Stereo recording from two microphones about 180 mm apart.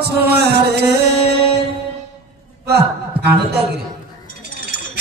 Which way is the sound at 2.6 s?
65° right (ahead or behind).